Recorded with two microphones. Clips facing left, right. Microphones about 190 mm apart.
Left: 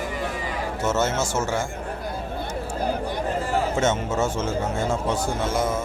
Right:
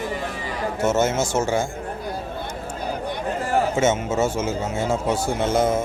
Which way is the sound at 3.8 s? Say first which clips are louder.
Right 2 dB; 5° right (ahead or behind).